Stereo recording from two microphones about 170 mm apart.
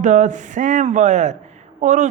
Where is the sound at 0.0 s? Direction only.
45° right (ahead or behind).